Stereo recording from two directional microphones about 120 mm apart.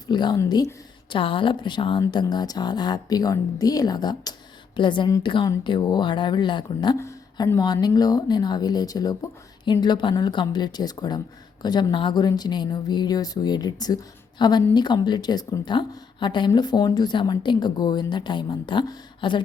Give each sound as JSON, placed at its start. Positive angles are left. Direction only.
{"t": 0.1, "sound": "speech", "side_deg": 40}
{"t": 1.1, "sound": "speech", "side_deg": 45}
{"t": 7.0, "sound": "speech", "side_deg": 25}